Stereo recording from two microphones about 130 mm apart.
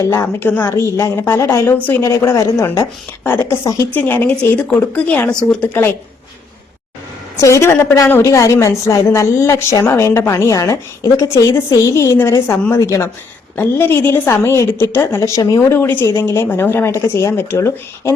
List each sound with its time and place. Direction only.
0.0 s a woman's voice: 20° left (ahead or behind)
7.4 s a woman's voice: 20° left (ahead or behind)